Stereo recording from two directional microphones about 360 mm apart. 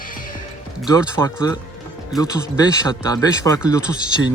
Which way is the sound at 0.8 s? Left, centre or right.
Centre.